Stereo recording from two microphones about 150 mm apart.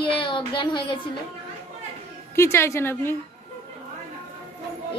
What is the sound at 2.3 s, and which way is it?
Speech, 15° left (ahead or behind).